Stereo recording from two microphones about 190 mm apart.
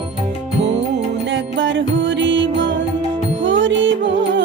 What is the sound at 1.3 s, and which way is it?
Music, 70° right (ahead or behind).